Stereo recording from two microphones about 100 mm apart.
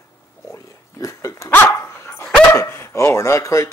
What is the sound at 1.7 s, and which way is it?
Dog, 25° left (ahead or behind).